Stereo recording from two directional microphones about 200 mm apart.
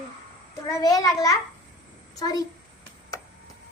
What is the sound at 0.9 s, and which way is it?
A child's voice, 15° left (ahead or behind).